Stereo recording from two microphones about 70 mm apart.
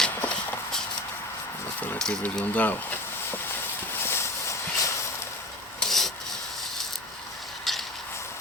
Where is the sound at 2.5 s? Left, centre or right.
Left.